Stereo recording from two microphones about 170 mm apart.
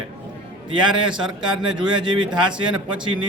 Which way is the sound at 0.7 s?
30° right (ahead or behind).